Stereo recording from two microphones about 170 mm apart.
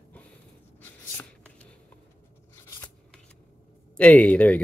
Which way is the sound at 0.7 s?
10° left (ahead or behind).